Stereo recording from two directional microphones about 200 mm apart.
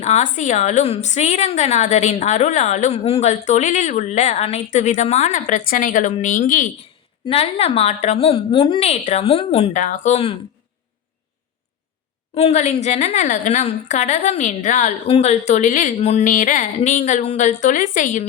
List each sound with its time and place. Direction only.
0.0 s a woman's voice: 35° left (ahead or behind)
12.3 s a woman's voice: 30° left (ahead or behind)